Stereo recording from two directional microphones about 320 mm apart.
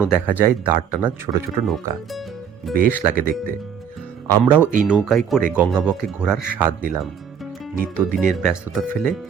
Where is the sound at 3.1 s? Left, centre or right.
Right.